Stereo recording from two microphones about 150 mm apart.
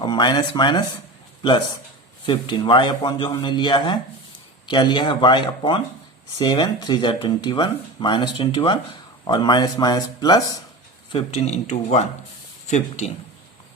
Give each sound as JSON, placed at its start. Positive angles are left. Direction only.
{"t": 0.0, "sound": "a man's voice", "side_deg": 30}
{"t": 11.1, "sound": "speech", "side_deg": 45}